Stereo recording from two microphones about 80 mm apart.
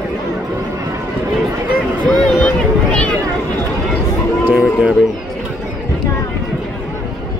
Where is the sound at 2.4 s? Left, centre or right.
Centre.